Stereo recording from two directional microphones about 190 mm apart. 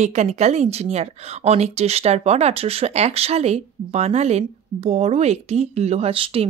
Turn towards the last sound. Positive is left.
turn(degrees=-30)  # may be behind; listen again after turning